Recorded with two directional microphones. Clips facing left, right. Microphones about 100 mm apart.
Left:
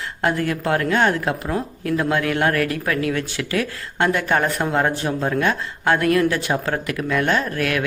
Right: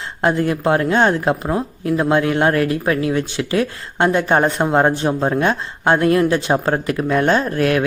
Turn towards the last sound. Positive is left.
turn(degrees=-30)  # may be behind; listen again after turning